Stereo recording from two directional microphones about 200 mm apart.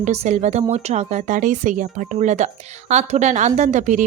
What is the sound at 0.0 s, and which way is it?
Speech, 35° right (ahead or behind).